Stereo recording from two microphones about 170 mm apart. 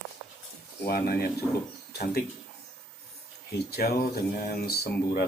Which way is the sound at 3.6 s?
65° left (ahead or behind).